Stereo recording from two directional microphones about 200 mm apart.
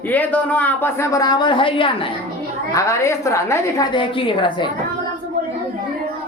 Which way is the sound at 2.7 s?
15° left (ahead or behind).